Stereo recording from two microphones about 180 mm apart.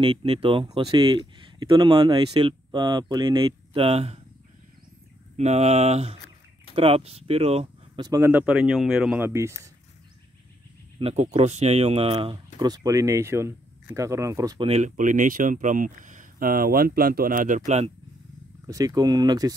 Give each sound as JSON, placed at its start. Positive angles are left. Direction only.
{"t": 0.0, "sound": "speech", "side_deg": -30}
{"t": 5.4, "sound": "speech", "side_deg": -35}
{"t": 11.0, "sound": "speech", "side_deg": -35}
{"t": 14.7, "sound": "speech", "side_deg": -45}
{"t": 18.7, "sound": "speech", "side_deg": -20}